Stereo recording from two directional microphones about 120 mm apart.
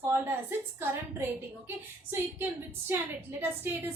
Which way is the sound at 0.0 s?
20° right (ahead or behind).